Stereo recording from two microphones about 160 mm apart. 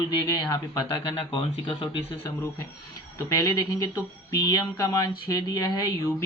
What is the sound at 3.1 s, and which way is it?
Speech, 20° left (ahead or behind).